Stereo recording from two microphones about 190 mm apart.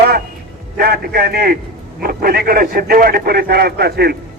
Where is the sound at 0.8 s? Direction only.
55° right (ahead or behind).